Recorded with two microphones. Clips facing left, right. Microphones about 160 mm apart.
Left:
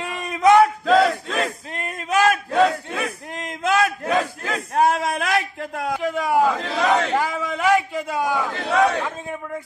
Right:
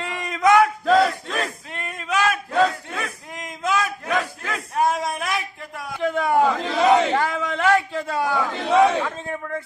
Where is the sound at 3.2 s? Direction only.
60° left (ahead or behind).